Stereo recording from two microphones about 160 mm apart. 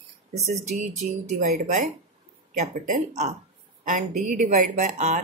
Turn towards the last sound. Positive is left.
turn(degrees=-50)  # may be behind; listen again after turning